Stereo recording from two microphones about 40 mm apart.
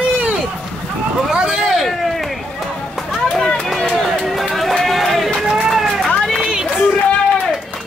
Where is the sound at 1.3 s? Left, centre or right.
Right.